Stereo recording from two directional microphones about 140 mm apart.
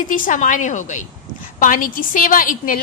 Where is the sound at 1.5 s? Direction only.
70° left (ahead or behind).